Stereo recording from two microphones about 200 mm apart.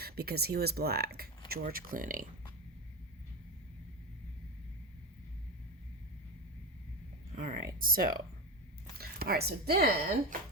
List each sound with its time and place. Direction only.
0.0 s speech: 50° right (ahead or behind)
7.3 s speech: 45° right (ahead or behind)